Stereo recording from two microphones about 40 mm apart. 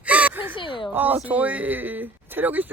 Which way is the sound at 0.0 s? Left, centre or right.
Right.